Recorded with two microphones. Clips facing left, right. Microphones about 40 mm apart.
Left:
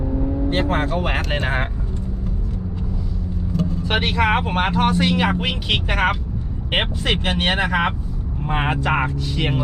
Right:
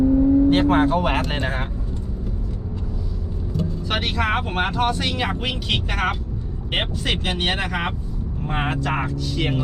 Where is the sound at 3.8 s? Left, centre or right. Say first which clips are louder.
Left 4 dB; centre.